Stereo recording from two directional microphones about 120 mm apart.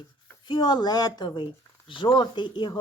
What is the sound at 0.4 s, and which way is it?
A woman's voice, 40° left (ahead or behind).